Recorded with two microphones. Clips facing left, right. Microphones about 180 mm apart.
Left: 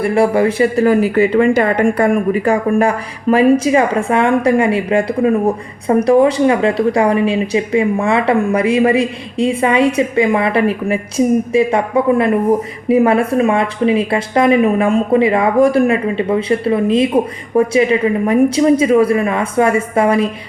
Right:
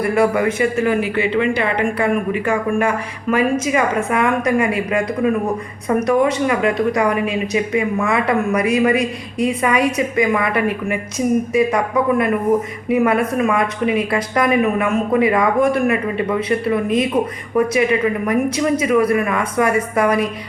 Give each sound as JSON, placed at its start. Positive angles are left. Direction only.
{"t": 0.0, "sound": "speech", "side_deg": 30}